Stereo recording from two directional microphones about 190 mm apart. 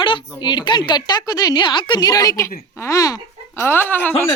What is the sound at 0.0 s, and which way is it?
A woman's voice, 25° left (ahead or behind).